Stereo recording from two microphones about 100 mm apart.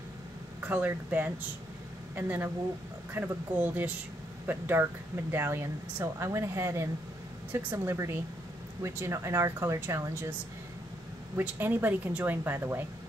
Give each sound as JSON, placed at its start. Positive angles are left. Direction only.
{"t": 0.6, "sound": "speech", "side_deg": -15}
{"t": 11.3, "sound": "speech", "side_deg": -20}